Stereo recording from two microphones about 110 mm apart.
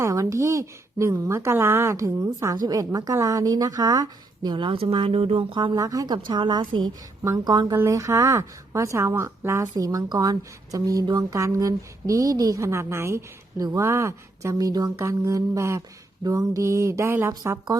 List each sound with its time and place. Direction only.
0.0 s speech: 30° right (ahead or behind)
4.5 s speech: 50° right (ahead or behind)
5.7 s speech: 30° right (ahead or behind)
6.2 s a woman's voice: 45° right (ahead or behind); by 17.6 s 25° right (ahead or behind)